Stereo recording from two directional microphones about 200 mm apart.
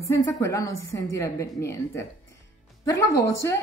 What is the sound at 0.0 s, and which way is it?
Speech, 15° left (ahead or behind).